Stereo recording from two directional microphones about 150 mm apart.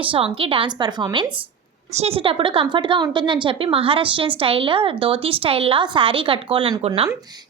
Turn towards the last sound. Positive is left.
turn(degrees=-35)  # may be behind; listen again after turning